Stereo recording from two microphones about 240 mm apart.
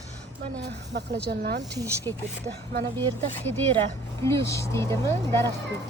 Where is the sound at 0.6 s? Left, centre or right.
Right.